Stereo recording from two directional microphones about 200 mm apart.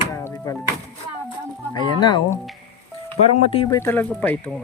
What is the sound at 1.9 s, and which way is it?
Speech, 20° left (ahead or behind).